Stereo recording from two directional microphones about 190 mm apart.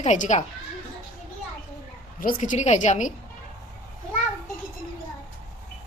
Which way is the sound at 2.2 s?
45° left (ahead or behind).